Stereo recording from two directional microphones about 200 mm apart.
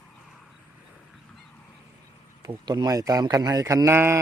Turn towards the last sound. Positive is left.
turn(degrees=-10)  # may be behind; listen again after turning